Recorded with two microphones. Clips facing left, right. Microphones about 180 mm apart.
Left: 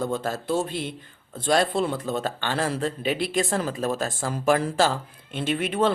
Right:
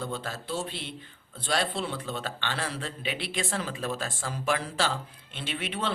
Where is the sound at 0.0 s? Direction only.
45° left (ahead or behind).